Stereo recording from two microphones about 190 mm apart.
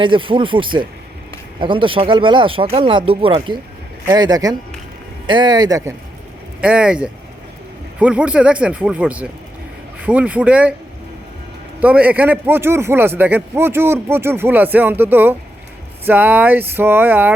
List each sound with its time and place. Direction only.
0.0 s speech: 25° right (ahead or behind)
6.6 s a man's voice: 5° right (ahead or behind)
11.8 s a man's voice: 5° right (ahead or behind)